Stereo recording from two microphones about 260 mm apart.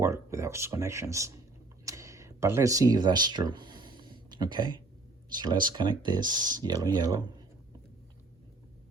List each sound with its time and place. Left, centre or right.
0.0 s speech: centre
1.8 s a sound: centre
5.3 s speech: centre